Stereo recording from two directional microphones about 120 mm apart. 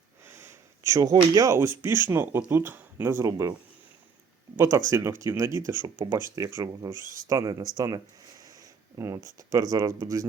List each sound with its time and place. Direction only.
0.3 s sniff: 20° right (ahead or behind)
0.9 s speech: 30° right (ahead or behind)
1.8 s speech: 20° right (ahead or behind)
4.5 s speech: 25° right (ahead or behind)
5.8 s speech: 35° right (ahead or behind)